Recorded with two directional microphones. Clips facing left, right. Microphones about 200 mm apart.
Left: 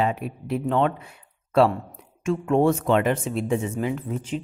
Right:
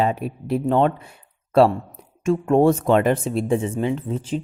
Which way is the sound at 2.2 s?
40° right (ahead or behind).